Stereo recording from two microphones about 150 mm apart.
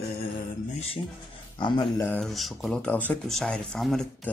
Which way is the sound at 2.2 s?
Centre (ahead or behind).